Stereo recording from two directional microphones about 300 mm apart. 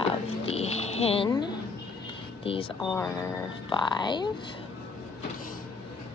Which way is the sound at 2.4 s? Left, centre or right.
Centre.